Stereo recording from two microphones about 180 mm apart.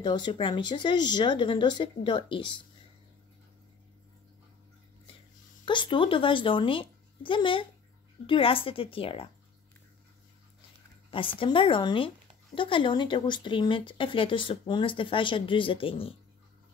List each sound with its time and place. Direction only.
0.0 s speech: 25° left (ahead or behind)
5.7 s speech: 25° left (ahead or behind)
11.1 s speech: 30° left (ahead or behind)